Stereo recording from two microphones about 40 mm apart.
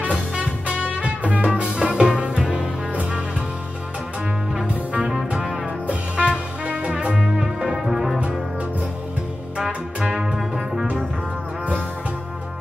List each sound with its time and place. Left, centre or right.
0.4 s music: right
1.4 s music: right
2.9 s music: right
4.6 s music: right
5.3 s music: centre
5.9 s music: right
7.3 s music: centre
7.8 s music: centre
9.9 s music: right